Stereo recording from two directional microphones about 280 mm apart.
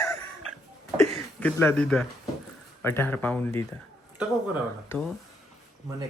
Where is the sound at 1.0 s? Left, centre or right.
Centre.